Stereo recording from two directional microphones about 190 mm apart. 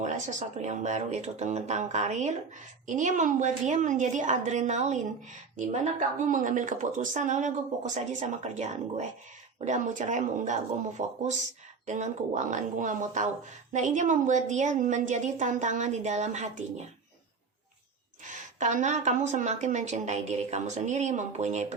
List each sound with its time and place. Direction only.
0.0 s speech: 40° right (ahead or behind)
18.3 s speech: 40° right (ahead or behind)